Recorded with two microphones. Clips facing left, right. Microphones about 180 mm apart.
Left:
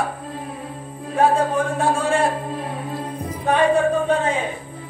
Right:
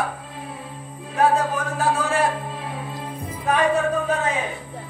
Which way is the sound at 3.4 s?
30° left (ahead or behind).